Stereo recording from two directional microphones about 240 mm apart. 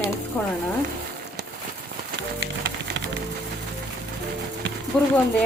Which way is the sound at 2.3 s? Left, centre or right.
Right.